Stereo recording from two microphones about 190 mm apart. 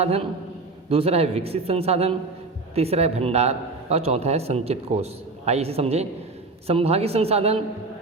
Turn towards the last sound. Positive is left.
turn(degrees=-30)  # may be behind; listen again after turning